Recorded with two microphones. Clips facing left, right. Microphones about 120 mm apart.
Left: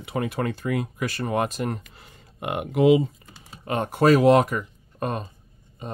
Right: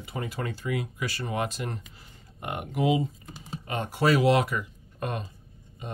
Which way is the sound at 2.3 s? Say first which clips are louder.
Left 7 dB; 85° left.